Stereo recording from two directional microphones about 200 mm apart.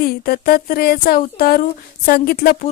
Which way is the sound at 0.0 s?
50° left (ahead or behind).